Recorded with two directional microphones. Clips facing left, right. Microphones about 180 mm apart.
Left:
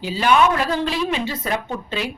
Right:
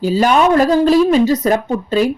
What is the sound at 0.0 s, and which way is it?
A woman's voice, 40° right (ahead or behind).